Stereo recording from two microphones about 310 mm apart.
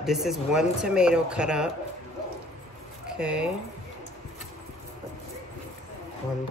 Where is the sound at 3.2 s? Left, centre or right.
Centre.